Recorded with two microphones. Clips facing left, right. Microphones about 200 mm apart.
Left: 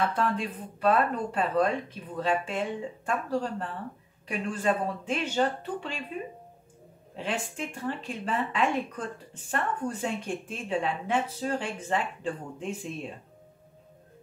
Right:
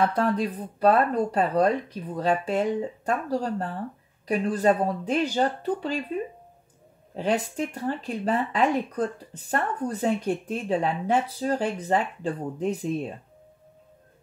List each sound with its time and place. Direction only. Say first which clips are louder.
0.0 s speech: right 5 dB; 40° right (ahead or behind)
7.2 s speech: right 7 dB; 40° right (ahead or behind)